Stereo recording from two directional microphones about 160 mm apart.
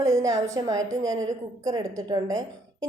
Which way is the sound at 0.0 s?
20° right (ahead or behind).